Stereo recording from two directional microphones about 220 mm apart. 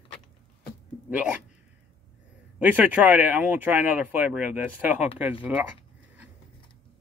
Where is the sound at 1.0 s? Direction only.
5° right (ahead or behind).